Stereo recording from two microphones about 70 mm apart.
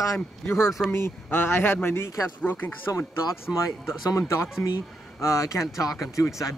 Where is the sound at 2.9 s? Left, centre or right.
Left.